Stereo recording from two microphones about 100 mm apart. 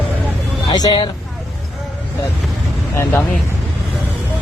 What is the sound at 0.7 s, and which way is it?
Speech, 40° left (ahead or behind).